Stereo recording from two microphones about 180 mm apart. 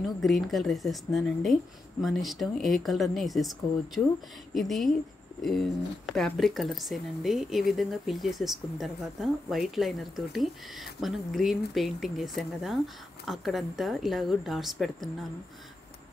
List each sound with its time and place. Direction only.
0.0 s speech: centre (ahead or behind)